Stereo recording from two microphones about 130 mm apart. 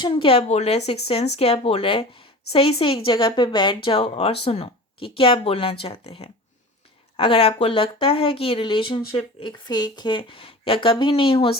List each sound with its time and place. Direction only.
0.0 s speech: 45° left (ahead or behind)